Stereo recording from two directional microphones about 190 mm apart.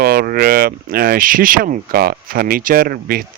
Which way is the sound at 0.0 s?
50° right (ahead or behind).